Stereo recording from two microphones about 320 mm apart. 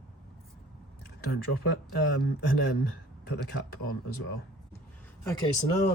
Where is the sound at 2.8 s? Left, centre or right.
Left.